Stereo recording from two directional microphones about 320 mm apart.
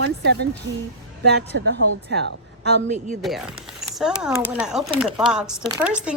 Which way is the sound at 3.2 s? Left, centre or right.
Centre.